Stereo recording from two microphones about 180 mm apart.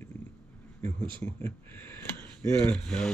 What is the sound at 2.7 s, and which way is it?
Speech, 5° left (ahead or behind).